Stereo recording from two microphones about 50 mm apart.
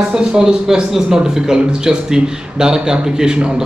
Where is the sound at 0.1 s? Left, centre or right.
Centre.